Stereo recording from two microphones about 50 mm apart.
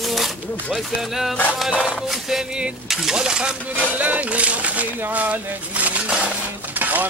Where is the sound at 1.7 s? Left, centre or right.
Centre.